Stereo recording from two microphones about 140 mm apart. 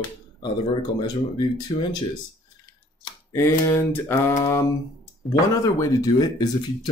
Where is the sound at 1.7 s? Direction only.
35° left (ahead or behind).